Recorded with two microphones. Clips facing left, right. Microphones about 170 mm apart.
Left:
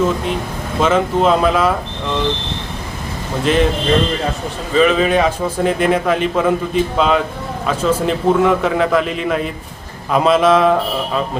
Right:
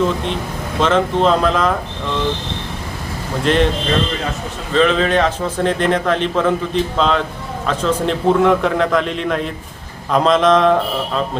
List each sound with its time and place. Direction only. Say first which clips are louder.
0.8 s a man's voice: left 1 dB; 5° left (ahead or behind)
3.4 s a man's voice: even; 5° left (ahead or behind)
4.7 s a man's voice: left 1 dB; 5° left (ahead or behind)